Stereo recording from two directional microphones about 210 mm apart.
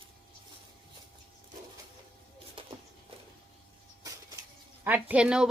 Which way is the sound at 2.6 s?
25° right (ahead or behind).